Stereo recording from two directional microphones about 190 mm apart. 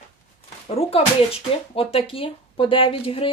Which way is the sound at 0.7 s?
30° left (ahead or behind).